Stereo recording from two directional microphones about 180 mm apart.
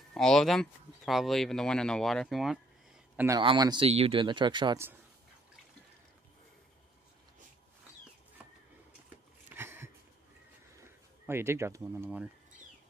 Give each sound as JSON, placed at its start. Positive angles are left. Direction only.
{"t": 0.1, "sound": "speech", "side_deg": 5}
{"t": 3.3, "sound": "speech", "side_deg": -25}
{"t": 9.5, "sound": "a sound", "side_deg": -15}
{"t": 11.2, "sound": "speech", "side_deg": -15}